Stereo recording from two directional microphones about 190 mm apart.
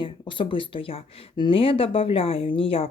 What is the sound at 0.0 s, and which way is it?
Speech, 25° left (ahead or behind).